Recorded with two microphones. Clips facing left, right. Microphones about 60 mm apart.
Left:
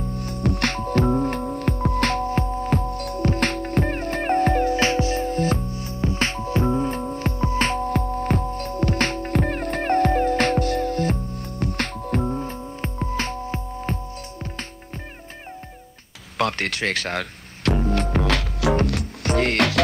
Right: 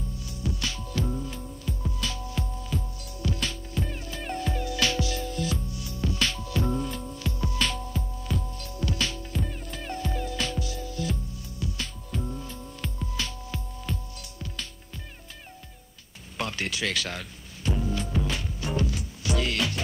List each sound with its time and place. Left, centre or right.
0.1 s music: left
7.9 s music: left
16.3 s music: left
18.8 s music: left